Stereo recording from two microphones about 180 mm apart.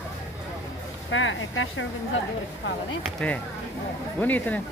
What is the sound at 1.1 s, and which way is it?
Speech, 90° left.